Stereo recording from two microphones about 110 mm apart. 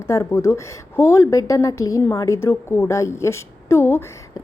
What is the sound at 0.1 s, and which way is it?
A woman's voice, 25° left (ahead or behind).